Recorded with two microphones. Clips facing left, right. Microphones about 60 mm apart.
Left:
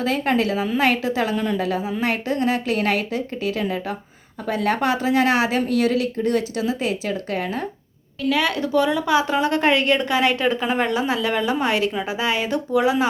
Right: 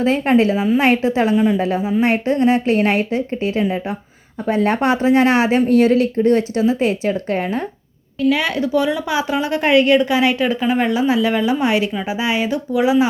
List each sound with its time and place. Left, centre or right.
0.0 s a woman's voice: right
8.2 s speech: centre
8.7 s speech: centre